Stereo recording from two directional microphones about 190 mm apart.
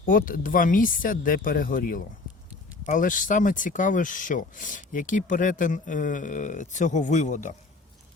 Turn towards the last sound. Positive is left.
turn(degrees=40)  # may be behind; listen again after turning